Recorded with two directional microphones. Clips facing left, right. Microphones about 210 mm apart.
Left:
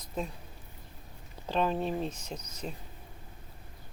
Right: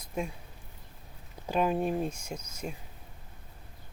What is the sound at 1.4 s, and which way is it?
Speech, 10° right (ahead or behind).